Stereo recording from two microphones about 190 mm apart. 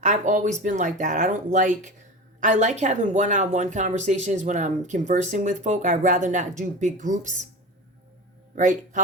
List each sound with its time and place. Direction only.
0.0 s speech: 40° right (ahead or behind)
8.5 s speech: 40° right (ahead or behind)